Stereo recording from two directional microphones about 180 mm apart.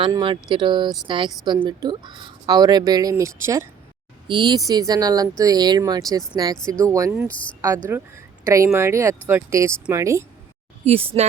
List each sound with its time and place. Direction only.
0.0 s speech: 25° right (ahead or behind)
7.3 s speech: 5° left (ahead or behind)
7.9 s speech: 10° right (ahead or behind)
10.8 s speech: 35° right (ahead or behind)